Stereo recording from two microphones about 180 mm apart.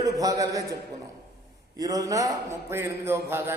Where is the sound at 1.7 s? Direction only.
20° right (ahead or behind).